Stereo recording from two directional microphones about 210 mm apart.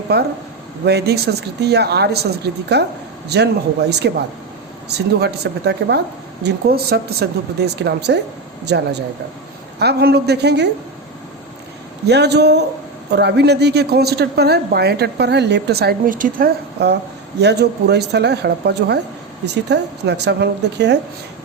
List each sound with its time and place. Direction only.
0.1 s a woman's voice: 50° right (ahead or behind)
12.0 s a woman's voice: 50° right (ahead or behind)